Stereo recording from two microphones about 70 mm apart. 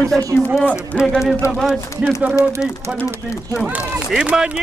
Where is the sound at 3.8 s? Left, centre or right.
Centre.